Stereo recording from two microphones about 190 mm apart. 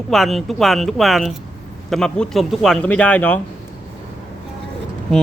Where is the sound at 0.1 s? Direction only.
Centre (ahead or behind).